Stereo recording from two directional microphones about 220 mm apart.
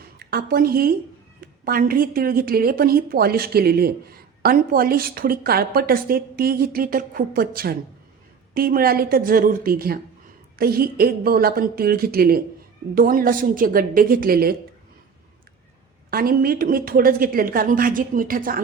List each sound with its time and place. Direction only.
0.2 s a woman's voice: 45° right (ahead or behind)
16.0 s a woman's voice: 45° right (ahead or behind)